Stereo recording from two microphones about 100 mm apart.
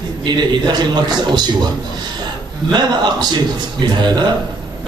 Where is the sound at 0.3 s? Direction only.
45° right (ahead or behind).